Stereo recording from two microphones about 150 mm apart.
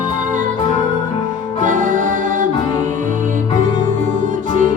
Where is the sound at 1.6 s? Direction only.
60° right (ahead or behind).